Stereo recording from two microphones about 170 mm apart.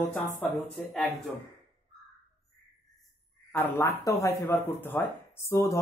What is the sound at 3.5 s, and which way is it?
Speech, 10° left (ahead or behind).